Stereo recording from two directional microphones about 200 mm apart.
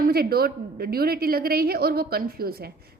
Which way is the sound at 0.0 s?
50° right (ahead or behind).